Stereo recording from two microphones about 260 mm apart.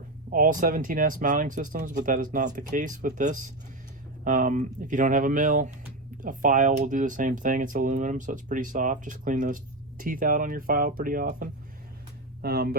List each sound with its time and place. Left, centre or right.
0.3 s speech: right